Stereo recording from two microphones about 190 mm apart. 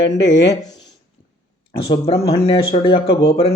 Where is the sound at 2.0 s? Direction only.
30° left (ahead or behind).